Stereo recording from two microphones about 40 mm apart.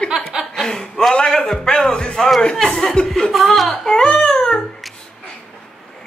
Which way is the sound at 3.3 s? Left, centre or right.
Centre.